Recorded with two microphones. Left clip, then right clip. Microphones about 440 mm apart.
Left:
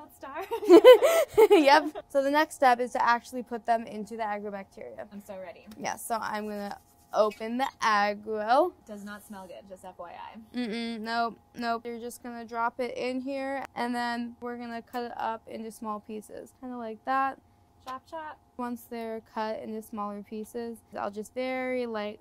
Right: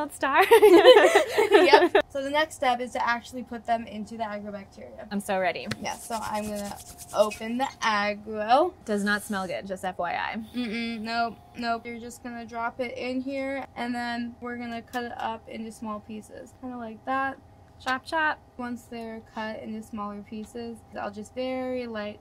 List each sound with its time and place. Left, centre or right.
0.0 s speech: right
0.7 s a woman's voice: left
5.1 s speech: right
5.8 s speech: left
8.8 s a woman's voice: right
10.5 s speech: left
17.8 s speech: right
18.6 s speech: left